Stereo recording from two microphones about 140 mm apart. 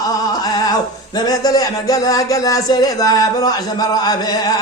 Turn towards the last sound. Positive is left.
turn(degrees=30)  # may be behind; listen again after turning